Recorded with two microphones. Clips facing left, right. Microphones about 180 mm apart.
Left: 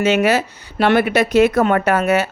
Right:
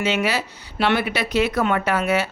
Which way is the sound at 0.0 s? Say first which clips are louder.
Left 7 dB; 45° left (ahead or behind).